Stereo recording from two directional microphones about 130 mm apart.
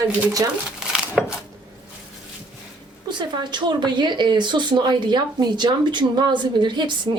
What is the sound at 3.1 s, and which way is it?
Speech, 35° right (ahead or behind).